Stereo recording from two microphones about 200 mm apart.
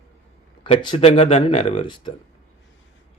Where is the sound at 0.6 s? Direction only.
25° left (ahead or behind).